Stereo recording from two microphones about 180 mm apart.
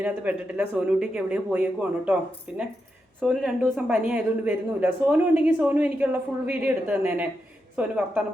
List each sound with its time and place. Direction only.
0.0 s a woman's voice: 10° right (ahead or behind)